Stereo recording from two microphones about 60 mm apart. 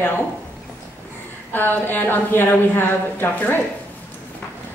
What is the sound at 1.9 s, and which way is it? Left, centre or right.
A woman's voice, left.